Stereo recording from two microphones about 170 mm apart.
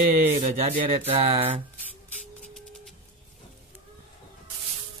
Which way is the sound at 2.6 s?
Centre (ahead or behind).